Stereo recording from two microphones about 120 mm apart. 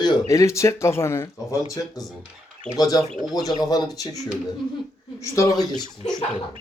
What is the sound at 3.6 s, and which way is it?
Speech, 35° left (ahead or behind).